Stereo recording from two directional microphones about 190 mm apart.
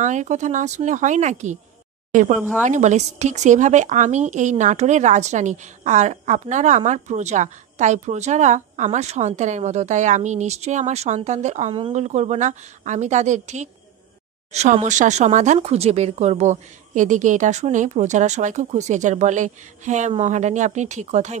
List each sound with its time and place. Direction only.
0.0 s speech: 40° right (ahead or behind)
2.6 s speech: 40° right (ahead or behind)